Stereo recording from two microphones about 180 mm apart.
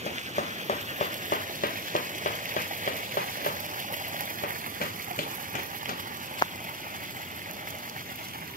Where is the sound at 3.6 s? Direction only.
45° right (ahead or behind).